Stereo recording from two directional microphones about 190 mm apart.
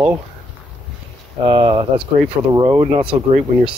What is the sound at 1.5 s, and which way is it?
Speech, 25° right (ahead or behind).